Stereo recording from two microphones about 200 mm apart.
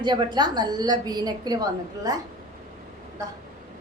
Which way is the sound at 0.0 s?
20° right (ahead or behind).